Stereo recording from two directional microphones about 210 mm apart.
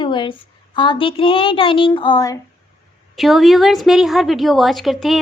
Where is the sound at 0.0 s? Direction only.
20° left (ahead or behind).